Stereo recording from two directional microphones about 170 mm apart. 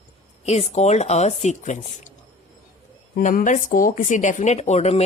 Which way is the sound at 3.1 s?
55° left (ahead or behind).